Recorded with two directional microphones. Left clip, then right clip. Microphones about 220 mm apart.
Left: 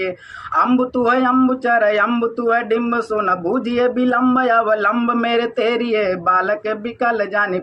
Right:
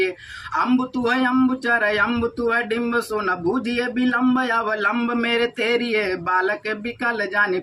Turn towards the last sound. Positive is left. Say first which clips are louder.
# left 2 dB
turn(degrees=-20)  # may be behind; listen again after turning